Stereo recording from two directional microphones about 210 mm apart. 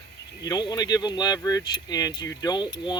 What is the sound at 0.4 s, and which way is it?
Speech, 20° left (ahead or behind).